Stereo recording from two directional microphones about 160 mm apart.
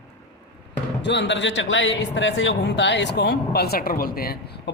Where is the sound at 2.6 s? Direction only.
90° left.